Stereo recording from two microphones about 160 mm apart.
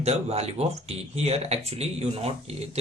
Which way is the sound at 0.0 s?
40° right (ahead or behind).